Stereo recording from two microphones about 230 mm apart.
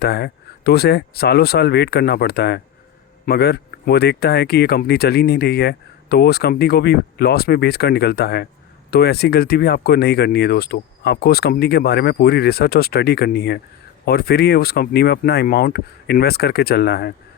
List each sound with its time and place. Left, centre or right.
0.0 s speech: left